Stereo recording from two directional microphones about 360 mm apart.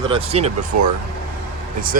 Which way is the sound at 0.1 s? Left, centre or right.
Centre.